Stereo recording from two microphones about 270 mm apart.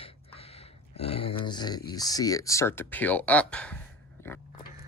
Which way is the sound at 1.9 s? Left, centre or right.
Centre.